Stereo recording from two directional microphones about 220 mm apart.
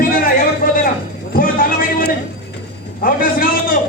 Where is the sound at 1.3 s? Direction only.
40° left (ahead or behind).